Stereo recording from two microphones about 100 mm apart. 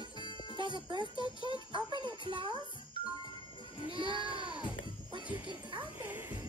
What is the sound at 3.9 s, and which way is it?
Speech, 60° right (ahead or behind).